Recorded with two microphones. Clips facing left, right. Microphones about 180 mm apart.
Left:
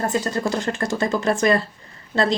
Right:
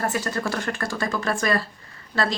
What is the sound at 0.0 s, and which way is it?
Speech, 20° left (ahead or behind).